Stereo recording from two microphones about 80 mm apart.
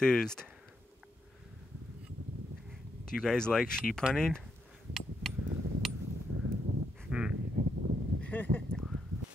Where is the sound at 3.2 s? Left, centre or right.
Centre.